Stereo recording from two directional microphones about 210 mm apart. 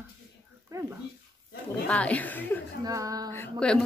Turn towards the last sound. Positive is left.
turn(degrees=5)  # may be behind; listen again after turning